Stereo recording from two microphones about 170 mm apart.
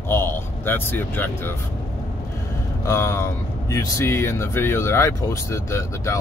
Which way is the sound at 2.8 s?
15° left (ahead or behind).